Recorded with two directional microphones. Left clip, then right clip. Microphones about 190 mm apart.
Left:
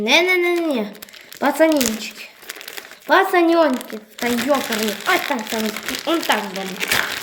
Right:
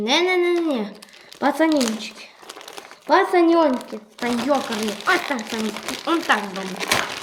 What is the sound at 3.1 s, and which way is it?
Speech, 5° right (ahead or behind).